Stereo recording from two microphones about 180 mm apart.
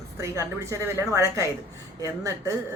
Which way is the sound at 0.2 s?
15° right (ahead or behind).